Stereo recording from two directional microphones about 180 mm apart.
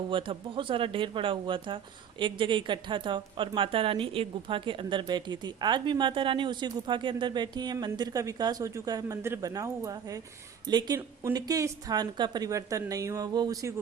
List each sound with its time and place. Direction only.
0.1 s speech: 30° right (ahead or behind)